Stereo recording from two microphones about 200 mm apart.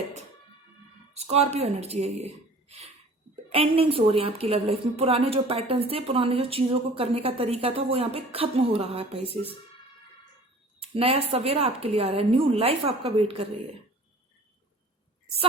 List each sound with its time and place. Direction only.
1.1 s a woman's voice: 30° right (ahead or behind)
10.8 s a woman's voice: 30° right (ahead or behind)